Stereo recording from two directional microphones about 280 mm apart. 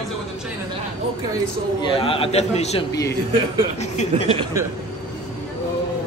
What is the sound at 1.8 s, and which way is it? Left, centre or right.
A man's voice, centre.